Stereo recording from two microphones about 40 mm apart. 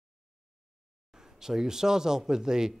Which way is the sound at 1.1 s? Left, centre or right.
Centre.